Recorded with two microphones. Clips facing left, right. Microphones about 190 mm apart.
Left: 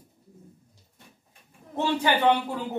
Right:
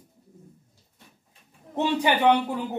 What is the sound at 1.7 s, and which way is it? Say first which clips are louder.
Speech: right 1 dB; 15° right (ahead or behind).